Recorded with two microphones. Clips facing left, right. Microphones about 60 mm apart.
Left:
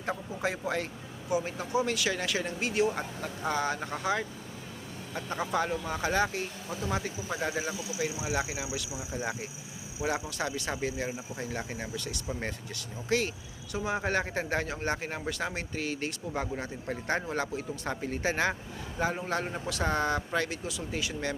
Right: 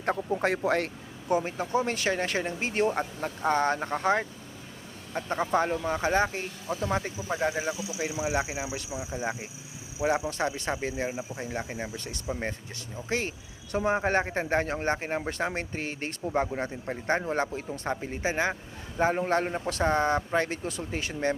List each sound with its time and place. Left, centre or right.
0.0 s speech: right
1.5 s a man's voice: right
7.3 s speech: right
8.9 s speech: centre
10.2 s a man's voice: right
16.8 s speech: right
17.2 s speech: right
18.9 s a man's voice: right
20.7 s a man's voice: right